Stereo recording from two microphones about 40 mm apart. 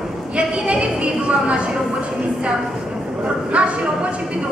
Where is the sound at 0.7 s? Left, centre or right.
Right.